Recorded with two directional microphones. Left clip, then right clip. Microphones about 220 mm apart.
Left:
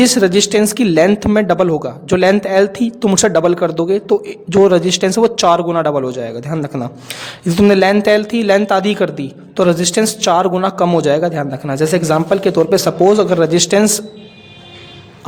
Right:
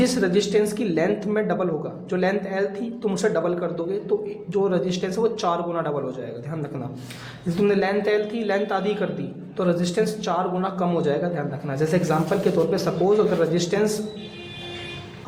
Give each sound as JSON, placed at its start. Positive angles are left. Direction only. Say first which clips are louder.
{"t": 0.0, "sound": "a man's voice", "louder": "left 9 dB", "side_deg": 50}